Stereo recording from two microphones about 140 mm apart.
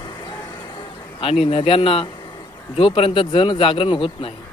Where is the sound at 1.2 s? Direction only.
40° left (ahead or behind).